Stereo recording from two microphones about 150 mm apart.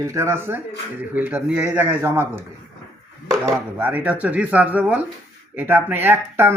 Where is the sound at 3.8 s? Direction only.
10° right (ahead or behind).